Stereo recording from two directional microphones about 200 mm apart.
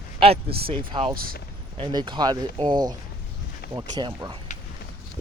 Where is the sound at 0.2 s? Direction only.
30° right (ahead or behind).